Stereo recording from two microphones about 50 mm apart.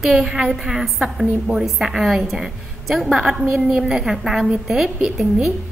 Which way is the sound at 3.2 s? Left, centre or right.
Centre.